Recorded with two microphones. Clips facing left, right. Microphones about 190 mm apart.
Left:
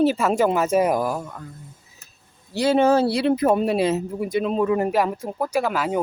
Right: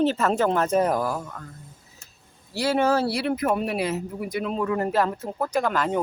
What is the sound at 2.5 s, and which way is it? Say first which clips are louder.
Speech: left 4 dB; 20° left (ahead or behind).